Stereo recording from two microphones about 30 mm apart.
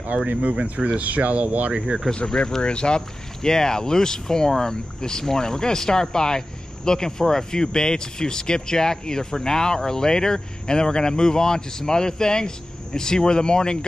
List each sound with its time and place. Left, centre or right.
0.3 s speech: right
1.0 s speech: right
1.7 s speech: right
2.2 s speech: left
3.4 s speech: centre